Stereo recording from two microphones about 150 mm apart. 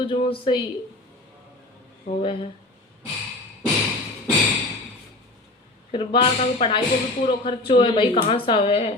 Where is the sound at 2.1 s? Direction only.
85° left.